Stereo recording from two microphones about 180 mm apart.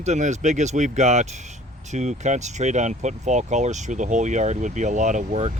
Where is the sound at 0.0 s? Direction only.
40° right (ahead or behind).